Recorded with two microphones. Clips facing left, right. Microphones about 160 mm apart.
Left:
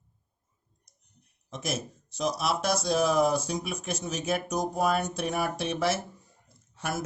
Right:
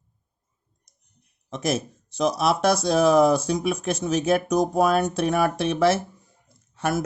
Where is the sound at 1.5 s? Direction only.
70° right (ahead or behind).